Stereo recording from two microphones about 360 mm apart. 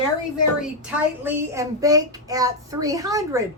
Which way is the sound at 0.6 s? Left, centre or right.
Centre.